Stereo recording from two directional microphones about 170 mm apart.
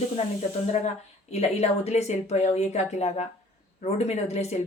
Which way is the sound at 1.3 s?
40° left (ahead or behind).